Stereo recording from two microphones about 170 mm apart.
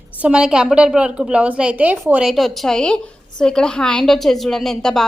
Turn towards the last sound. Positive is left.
turn(degrees=5)  # may be behind; listen again after turning